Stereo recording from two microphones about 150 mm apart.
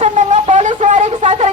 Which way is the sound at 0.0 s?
50° right (ahead or behind).